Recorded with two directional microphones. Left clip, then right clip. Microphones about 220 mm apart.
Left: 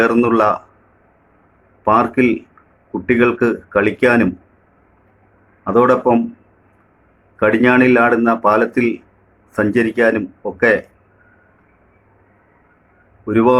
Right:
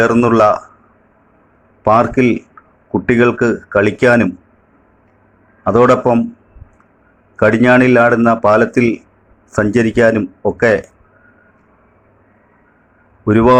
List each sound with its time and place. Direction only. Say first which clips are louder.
0.0 s speech: right 3 dB; 20° right (ahead or behind)
1.8 s speech: right 2 dB; 20° right (ahead or behind)
5.6 s speech: right 3 dB; 20° right (ahead or behind)
7.3 s speech: right 3 dB; 20° right (ahead or behind)
13.2 s speech: right 4 dB; 25° right (ahead or behind)